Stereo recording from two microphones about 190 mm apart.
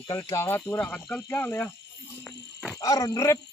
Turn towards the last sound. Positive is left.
turn(degrees=15)  # may be behind; listen again after turning